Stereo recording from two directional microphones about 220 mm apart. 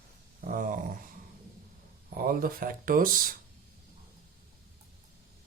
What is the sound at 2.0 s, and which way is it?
Speech, 40° right (ahead or behind).